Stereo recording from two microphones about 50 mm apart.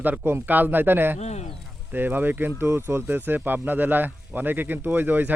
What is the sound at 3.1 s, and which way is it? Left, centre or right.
Speech, right.